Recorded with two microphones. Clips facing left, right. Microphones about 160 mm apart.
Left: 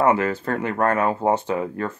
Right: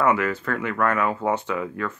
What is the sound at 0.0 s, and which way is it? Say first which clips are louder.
Speech: left 2 dB; 35° left (ahead or behind).